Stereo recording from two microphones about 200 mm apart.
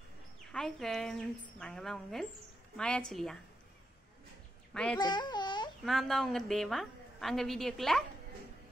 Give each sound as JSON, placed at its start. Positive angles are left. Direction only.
{"t": 0.5, "sound": "a woman's voice", "side_deg": 5}
{"t": 4.9, "sound": "babbling", "side_deg": 20}
{"t": 5.9, "sound": "a woman's voice", "side_deg": 0}